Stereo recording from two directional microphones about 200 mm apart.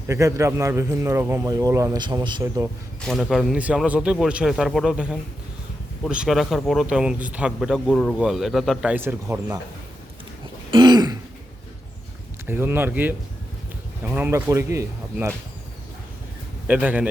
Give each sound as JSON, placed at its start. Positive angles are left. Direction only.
{"t": 0.1, "sound": "a man's voice", "side_deg": -15}
{"t": 3.0, "sound": "speech", "side_deg": 0}
{"t": 10.7, "sound": "throat clearing", "side_deg": -20}
{"t": 12.5, "sound": "a man's voice", "side_deg": -10}
{"t": 16.6, "sound": "a man's voice", "side_deg": -10}